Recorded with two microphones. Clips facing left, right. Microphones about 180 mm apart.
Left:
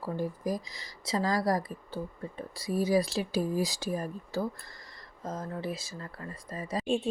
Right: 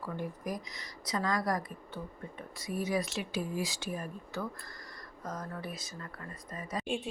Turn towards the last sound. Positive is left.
turn(degrees=30)  # may be behind; listen again after turning